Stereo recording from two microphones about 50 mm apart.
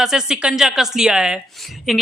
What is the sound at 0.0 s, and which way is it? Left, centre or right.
A woman's voice, centre.